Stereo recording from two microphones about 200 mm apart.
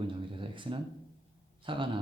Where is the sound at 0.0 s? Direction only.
25° right (ahead or behind).